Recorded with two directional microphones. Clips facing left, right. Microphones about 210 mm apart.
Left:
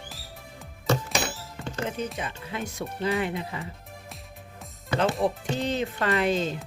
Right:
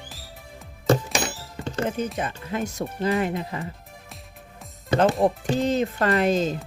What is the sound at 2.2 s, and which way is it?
Speech, 45° right (ahead or behind).